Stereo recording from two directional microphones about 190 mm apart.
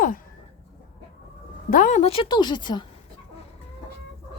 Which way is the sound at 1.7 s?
40° left (ahead or behind).